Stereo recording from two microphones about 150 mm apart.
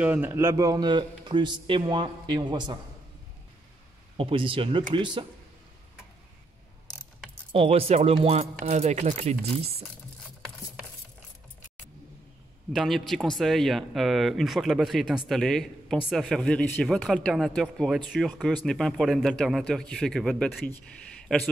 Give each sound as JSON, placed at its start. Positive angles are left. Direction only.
{"t": 0.0, "sound": "a man's voice", "side_deg": -10}
{"t": 4.2, "sound": "speech", "side_deg": -35}
{"t": 7.5, "sound": "speech", "side_deg": -40}
{"t": 12.7, "sound": "speech", "side_deg": 0}